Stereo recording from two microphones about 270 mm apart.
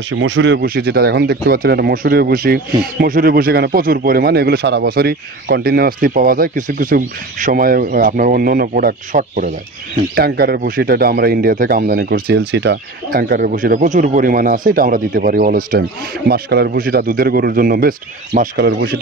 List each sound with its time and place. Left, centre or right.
0.1 s speech: right